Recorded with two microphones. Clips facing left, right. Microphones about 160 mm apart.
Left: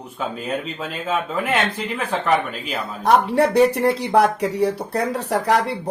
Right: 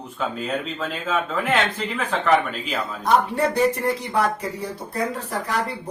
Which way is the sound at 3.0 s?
70° left (ahead or behind).